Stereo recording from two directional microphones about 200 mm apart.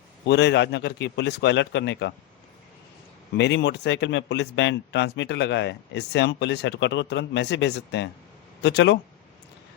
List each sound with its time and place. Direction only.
0.3 s speech: 60° left (ahead or behind)
3.3 s speech: 60° left (ahead or behind)